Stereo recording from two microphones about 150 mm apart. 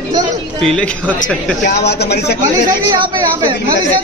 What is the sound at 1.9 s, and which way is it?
Speech, 90° left.